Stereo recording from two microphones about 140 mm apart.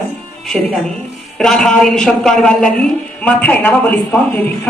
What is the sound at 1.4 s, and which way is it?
A man's voice, 5° left (ahead or behind).